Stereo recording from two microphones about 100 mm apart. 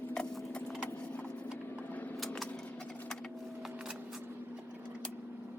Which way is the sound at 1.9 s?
15° left (ahead or behind).